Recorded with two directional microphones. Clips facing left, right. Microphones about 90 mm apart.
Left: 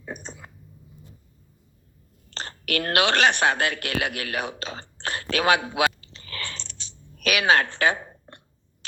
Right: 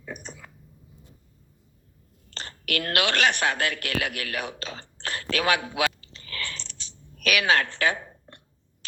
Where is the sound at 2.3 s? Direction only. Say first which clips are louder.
Left 2 dB; 35° left (ahead or behind).